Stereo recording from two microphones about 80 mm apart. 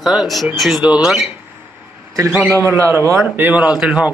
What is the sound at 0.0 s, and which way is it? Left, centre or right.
Speech, centre.